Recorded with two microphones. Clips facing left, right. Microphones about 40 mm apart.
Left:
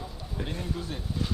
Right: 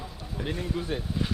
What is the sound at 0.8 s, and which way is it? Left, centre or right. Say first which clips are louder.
Speech: right 3 dB; right.